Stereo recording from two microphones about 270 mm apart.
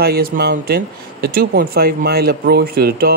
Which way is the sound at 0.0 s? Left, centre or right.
Right.